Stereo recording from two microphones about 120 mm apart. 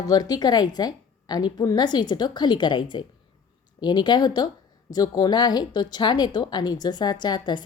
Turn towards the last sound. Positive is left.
turn(degrees=35)  # may be behind; listen again after turning